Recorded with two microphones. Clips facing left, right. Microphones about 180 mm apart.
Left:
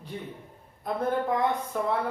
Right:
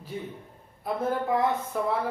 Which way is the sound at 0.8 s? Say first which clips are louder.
Even; 5° right (ahead or behind).